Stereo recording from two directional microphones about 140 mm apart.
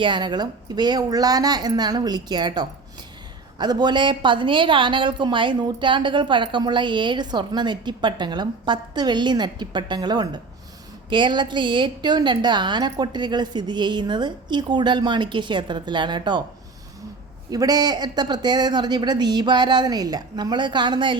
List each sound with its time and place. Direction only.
0.0 s a woman's voice: 35° right (ahead or behind)
17.5 s a woman's voice: 25° right (ahead or behind)